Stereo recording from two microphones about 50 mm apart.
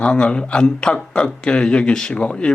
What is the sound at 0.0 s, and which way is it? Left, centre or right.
Speech, centre.